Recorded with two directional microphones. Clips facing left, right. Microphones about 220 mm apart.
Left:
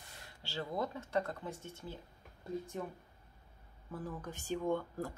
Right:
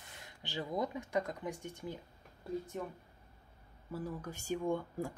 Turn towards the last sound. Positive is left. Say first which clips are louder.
# even
turn(degrees=-10)  # may be behind; listen again after turning